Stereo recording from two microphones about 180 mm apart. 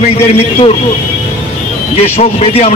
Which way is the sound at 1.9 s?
35° left (ahead or behind).